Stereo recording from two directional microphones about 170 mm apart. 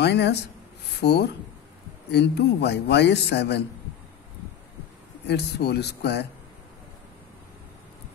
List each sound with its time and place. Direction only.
0.0 s a man's voice: 85° left
5.2 s speech: 75° left (ahead or behind)